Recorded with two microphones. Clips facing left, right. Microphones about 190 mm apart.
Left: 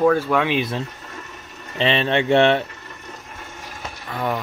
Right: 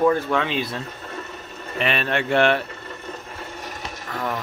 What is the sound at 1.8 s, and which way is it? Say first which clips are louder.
Speech: left 4 dB; 25° left (ahead or behind).